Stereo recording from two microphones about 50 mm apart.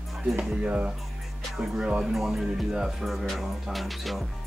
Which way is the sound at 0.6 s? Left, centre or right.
Right.